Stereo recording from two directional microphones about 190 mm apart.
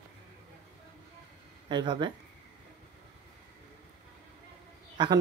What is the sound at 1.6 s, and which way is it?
Speech, 25° right (ahead or behind).